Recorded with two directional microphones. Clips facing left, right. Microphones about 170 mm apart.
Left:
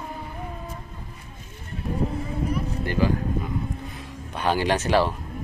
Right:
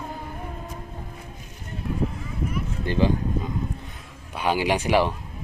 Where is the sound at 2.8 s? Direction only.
20° right (ahead or behind).